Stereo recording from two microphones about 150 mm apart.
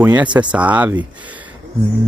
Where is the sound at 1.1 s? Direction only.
10° right (ahead or behind).